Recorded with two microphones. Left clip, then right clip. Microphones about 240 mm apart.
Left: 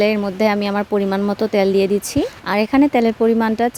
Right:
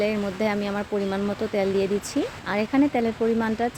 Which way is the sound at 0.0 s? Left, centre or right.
Left.